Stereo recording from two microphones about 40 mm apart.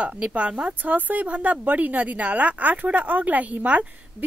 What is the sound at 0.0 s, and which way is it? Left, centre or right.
Speech, right.